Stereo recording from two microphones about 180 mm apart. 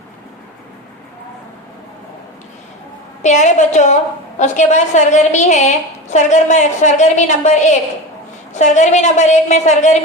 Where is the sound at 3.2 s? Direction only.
40° left (ahead or behind).